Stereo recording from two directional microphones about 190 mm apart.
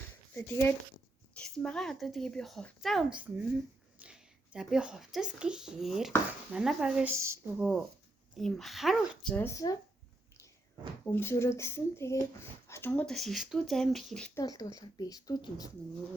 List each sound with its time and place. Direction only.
0.3 s speech: 10° left (ahead or behind); by 7.7 s 15° right (ahead or behind)
8.4 s speech: centre (ahead or behind)
11.1 s speech: 15° left (ahead or behind)
14.3 s a woman's voice: 20° left (ahead or behind)